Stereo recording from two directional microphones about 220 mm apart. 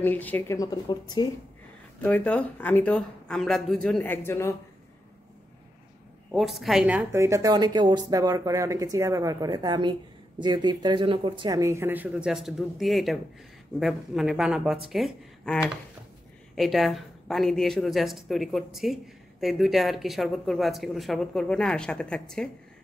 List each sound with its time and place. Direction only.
0.0 s speech: 10° left (ahead or behind)
2.0 s speech: 5° left (ahead or behind)
6.3 s speech: centre (ahead or behind)